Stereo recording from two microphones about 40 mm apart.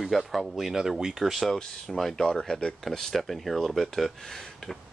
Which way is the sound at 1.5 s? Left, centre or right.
Centre.